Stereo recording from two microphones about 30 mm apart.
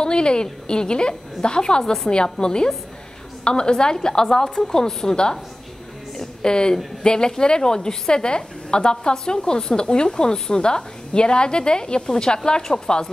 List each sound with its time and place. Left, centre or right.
0.0 s a woman's voice: left
6.1 s a sound: left
7.0 s a woman's voice: left